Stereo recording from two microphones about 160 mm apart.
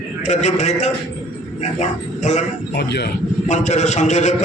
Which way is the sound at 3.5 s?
45° left (ahead or behind).